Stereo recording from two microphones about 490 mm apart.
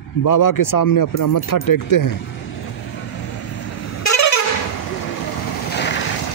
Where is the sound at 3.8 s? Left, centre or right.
Left.